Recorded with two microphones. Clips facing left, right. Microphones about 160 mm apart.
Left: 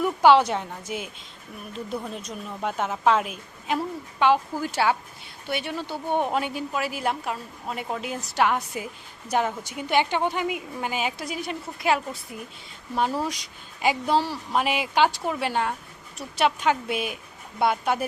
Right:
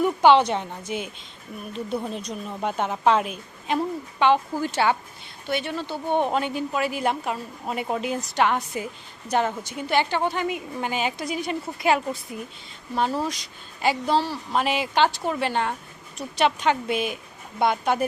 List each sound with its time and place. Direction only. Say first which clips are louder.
0.0 s a woman's voice: right 1 dB; 5° left (ahead or behind)
13.2 s a woman's voice: right 1 dB; 10° left (ahead or behind)